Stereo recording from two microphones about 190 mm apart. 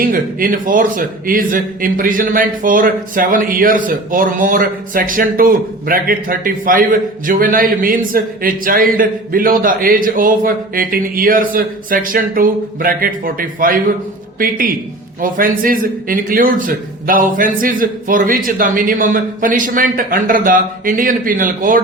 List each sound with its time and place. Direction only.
0.0 s a man's voice: 45° right (ahead or behind)